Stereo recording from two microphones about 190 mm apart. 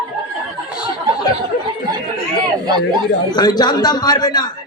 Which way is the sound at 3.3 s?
20° left (ahead or behind).